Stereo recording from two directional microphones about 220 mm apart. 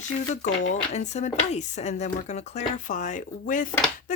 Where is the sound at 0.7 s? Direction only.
30° left (ahead or behind).